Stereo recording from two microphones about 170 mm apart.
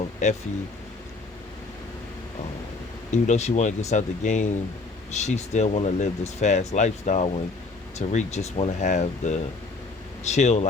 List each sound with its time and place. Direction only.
0.2 s speech: 45° left (ahead or behind)
3.1 s speech: 45° left (ahead or behind)